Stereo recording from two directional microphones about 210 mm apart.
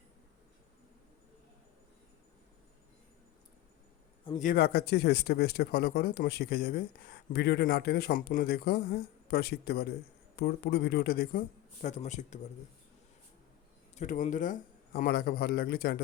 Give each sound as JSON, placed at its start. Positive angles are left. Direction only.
{"t": 4.4, "sound": "speech", "side_deg": 45}
{"t": 13.9, "sound": "speech", "side_deg": 35}